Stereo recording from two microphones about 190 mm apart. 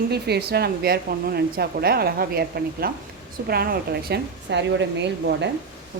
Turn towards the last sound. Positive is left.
turn(degrees=-65)  # may be behind; listen again after turning